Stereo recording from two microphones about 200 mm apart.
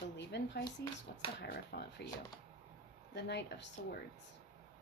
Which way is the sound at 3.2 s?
60° left (ahead or behind).